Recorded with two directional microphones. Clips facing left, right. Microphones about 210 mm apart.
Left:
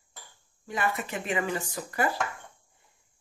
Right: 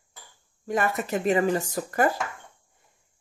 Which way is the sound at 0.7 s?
45° right (ahead or behind).